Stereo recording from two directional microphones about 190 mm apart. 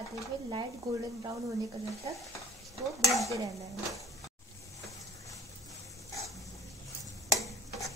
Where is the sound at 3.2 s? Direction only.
15° right (ahead or behind).